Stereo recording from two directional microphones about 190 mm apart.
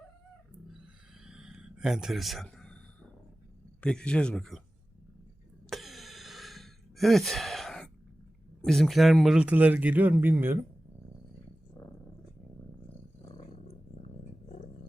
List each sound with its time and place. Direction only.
1.2 s a sound: 5° right (ahead or behind)
3.8 s speech: 5° left (ahead or behind)
5.7 s gasp: centre (ahead or behind)
8.6 s speech: centre (ahead or behind)
13.2 s purr: 30° left (ahead or behind)